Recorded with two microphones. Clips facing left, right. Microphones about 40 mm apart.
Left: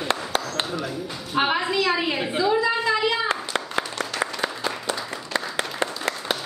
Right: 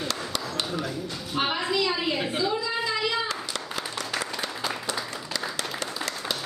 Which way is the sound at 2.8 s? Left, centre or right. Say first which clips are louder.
Left 5 dB; centre.